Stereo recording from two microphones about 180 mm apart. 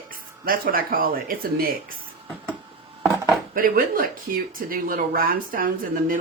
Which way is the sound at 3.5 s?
50° right (ahead or behind).